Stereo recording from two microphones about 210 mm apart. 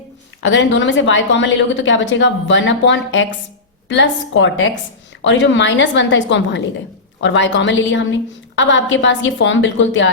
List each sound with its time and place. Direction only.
0.4 s a woman's voice: 60° left (ahead or behind)